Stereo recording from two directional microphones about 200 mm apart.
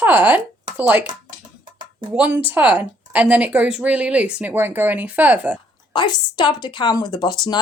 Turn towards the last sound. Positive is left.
turn(degrees=20)  # may be behind; listen again after turning